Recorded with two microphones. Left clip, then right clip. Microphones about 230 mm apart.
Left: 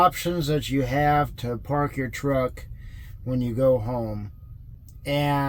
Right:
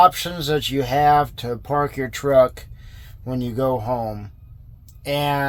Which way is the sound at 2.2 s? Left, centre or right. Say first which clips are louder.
Right 10 dB; centre.